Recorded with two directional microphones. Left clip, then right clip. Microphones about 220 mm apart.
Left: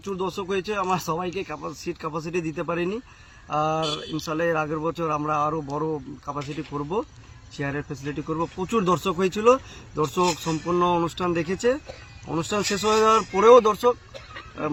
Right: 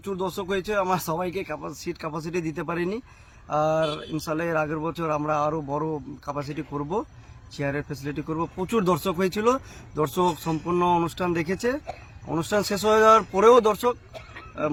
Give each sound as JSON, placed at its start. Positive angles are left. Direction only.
{"t": 0.1, "sound": "speech", "side_deg": -15}